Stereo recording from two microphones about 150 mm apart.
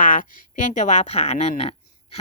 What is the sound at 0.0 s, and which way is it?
Speech, 60° left (ahead or behind).